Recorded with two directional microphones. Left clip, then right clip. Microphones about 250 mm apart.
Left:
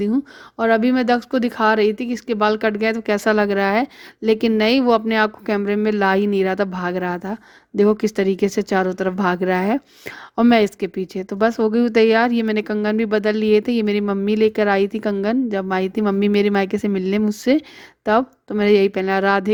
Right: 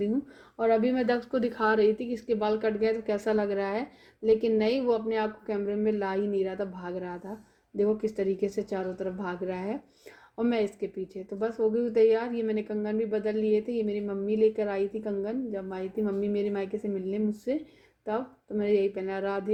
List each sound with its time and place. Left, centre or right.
0.5 s speech: left